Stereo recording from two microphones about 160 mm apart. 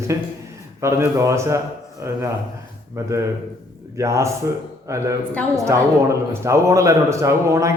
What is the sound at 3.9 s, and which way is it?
A man's voice, 20° right (ahead or behind).